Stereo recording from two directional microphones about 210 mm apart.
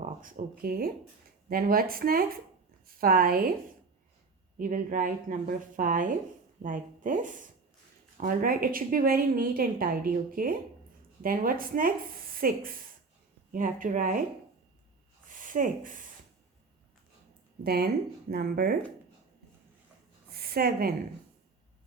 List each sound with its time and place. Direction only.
0.0 s a woman's voice: 40° right (ahead or behind)
4.5 s a woman's voice: 40° right (ahead or behind)
15.3 s rub: 40° right (ahead or behind)
17.6 s a woman's voice: 45° right (ahead or behind)
20.3 s a sound: 45° right (ahead or behind)